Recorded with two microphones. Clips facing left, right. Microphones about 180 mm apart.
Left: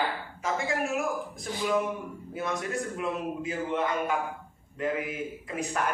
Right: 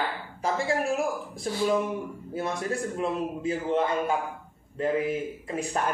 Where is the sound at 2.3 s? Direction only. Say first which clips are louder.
Right 2 dB; 30° right (ahead or behind).